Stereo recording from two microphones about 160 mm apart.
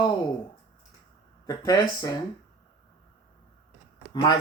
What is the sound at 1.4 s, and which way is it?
Speech, 25° left (ahead or behind).